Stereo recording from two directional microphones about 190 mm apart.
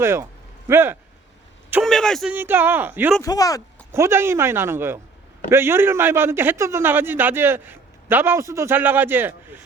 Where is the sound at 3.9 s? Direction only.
15° right (ahead or behind).